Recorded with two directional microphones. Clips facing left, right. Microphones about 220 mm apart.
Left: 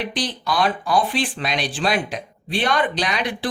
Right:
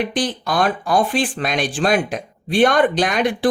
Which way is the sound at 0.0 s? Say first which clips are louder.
Right 5 dB; 50° right (ahead or behind).